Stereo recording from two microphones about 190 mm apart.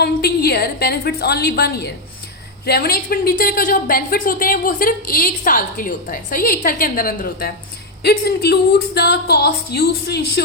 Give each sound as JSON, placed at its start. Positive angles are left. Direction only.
{"t": 0.0, "sound": "a woman's voice", "side_deg": 55}